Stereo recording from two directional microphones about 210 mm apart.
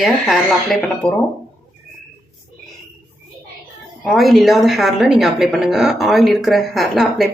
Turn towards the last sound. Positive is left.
turn(degrees=0)  # may be behind; listen again after turning